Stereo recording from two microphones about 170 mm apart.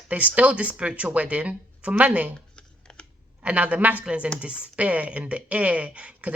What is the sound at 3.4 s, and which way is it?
Speech, 10° right (ahead or behind).